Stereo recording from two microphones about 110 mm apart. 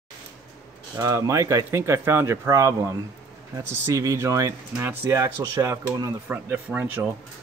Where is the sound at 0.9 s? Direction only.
30° right (ahead or behind).